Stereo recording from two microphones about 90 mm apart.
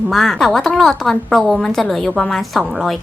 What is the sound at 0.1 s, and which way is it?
A woman's voice, centre (ahead or behind).